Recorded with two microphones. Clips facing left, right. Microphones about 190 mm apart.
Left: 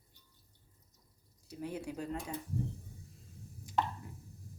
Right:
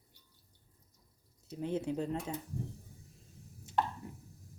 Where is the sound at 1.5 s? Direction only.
25° right (ahead or behind).